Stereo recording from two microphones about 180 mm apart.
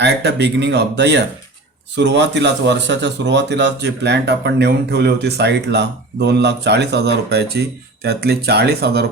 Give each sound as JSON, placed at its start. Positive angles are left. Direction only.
{"t": 0.0, "sound": "speech", "side_deg": -70}